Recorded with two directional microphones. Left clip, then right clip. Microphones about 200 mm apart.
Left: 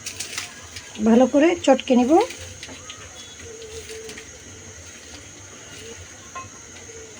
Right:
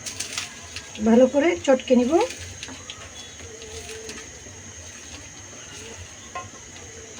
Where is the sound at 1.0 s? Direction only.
40° left (ahead or behind).